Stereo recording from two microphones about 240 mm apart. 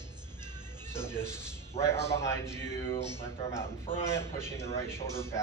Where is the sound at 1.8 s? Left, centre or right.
Left.